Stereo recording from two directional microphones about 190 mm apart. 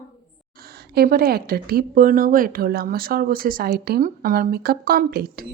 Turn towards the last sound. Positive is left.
turn(degrees=-50)  # may be behind; listen again after turning